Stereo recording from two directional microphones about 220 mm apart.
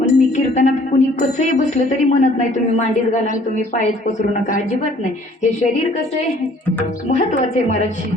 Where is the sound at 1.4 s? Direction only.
30° left (ahead or behind).